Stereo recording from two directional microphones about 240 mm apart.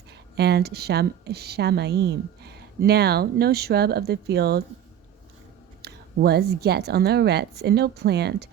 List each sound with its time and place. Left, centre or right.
0.1 s a woman's voice: right
5.8 s speech: right